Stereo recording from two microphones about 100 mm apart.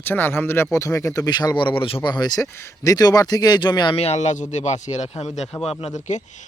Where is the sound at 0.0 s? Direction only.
20° left (ahead or behind); by 2.0 s 60° left (ahead or behind).